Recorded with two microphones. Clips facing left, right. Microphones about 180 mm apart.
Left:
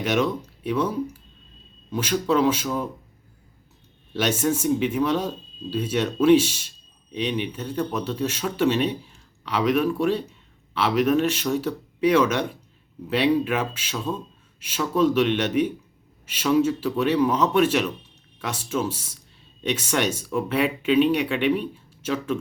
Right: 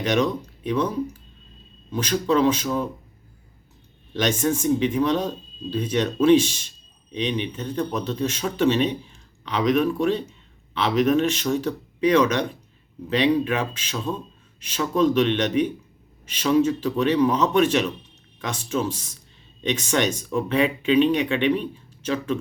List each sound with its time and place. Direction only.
0.0 s speech: 10° left (ahead or behind)
4.1 s speech: 5° left (ahead or behind)